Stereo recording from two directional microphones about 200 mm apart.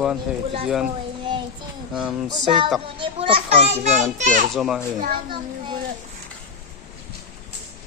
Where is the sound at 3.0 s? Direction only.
25° right (ahead or behind).